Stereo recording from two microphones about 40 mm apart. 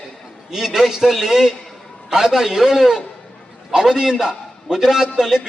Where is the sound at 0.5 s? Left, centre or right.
Centre.